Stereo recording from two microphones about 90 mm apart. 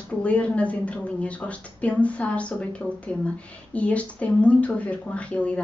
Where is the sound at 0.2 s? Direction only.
15° left (ahead or behind).